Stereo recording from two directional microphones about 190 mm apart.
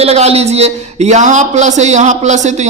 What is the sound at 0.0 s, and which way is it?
Speech, 35° right (ahead or behind).